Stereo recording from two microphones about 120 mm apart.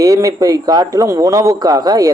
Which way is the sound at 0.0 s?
30° right (ahead or behind).